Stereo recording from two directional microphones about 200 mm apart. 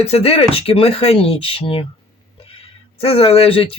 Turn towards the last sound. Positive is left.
turn(degrees=30)  # may be behind; listen again after turning